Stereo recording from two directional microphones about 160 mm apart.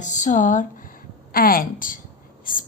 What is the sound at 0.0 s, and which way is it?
Speech, 50° left (ahead or behind).